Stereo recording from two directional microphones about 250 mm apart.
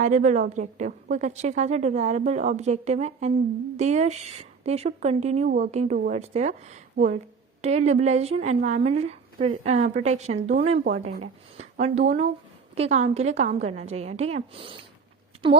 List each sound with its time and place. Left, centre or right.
0.0 s speech: right